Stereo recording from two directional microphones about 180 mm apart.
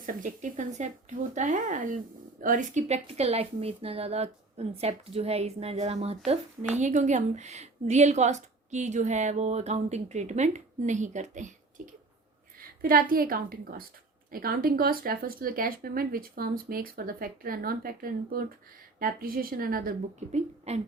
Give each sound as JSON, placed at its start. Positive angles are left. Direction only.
{"t": 0.0, "sound": "a woman's voice", "side_deg": -50}
{"t": 12.8, "sound": "a woman's voice", "side_deg": -55}